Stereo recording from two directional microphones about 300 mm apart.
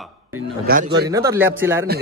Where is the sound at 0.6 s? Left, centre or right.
Right.